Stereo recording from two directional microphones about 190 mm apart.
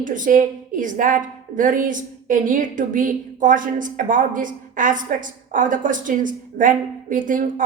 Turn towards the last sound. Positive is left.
turn(degrees=-45)  # may be behind; listen again after turning